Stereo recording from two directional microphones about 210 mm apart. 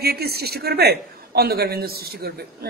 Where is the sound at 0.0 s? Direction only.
45° right (ahead or behind).